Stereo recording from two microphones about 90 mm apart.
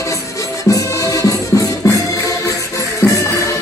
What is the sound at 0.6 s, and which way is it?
Music, 40° left (ahead or behind).